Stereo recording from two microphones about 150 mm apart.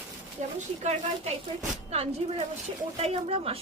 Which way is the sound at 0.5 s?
50° right (ahead or behind).